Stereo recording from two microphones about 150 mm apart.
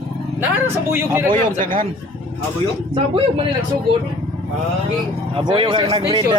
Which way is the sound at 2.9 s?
35° right (ahead or behind).